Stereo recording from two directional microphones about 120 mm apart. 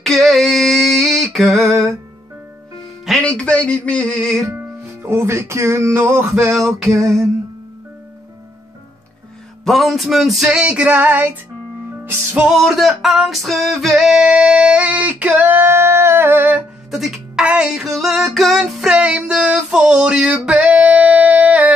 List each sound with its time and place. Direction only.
0.0 s a sound: centre (ahead or behind)
3.1 s speech: 5° left (ahead or behind)
5.0 s a sound: 20° right (ahead or behind)
9.7 s music: centre (ahead or behind); by 12.4 s 15° right (ahead or behind)
12.4 s music: centre (ahead or behind); by 16.6 s 15° right (ahead or behind)
16.9 s music: centre (ahead or behind)